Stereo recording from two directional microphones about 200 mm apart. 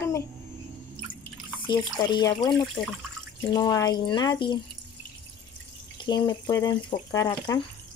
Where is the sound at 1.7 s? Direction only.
20° left (ahead or behind).